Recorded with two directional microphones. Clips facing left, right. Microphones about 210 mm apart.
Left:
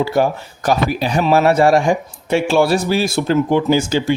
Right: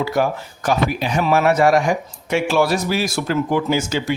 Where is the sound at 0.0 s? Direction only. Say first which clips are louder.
Left 3 dB; 30° left (ahead or behind).